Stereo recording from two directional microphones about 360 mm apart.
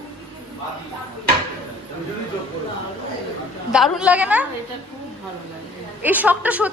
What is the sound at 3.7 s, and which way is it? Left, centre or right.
Speech, centre.